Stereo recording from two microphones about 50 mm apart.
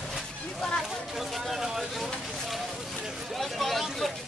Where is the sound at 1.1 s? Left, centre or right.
Centre.